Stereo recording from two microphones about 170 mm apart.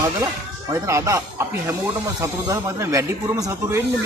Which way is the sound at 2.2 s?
15° right (ahead or behind).